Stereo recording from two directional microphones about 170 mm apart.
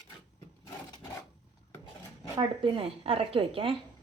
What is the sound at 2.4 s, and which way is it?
Speech, 30° right (ahead or behind).